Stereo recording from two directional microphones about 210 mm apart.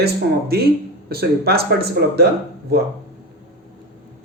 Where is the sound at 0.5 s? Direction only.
50° right (ahead or behind).